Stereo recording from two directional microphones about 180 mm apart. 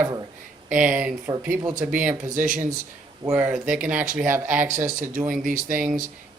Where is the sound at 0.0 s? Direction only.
20° right (ahead or behind).